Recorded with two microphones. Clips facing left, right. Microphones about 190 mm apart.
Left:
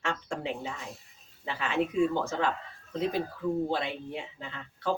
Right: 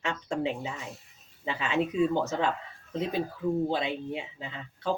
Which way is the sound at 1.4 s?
20° right (ahead or behind).